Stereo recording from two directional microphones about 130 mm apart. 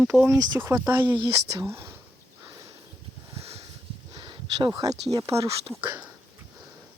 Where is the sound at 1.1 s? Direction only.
35° right (ahead or behind).